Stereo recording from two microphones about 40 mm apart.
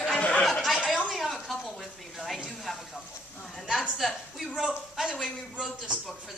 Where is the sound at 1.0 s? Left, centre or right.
Centre.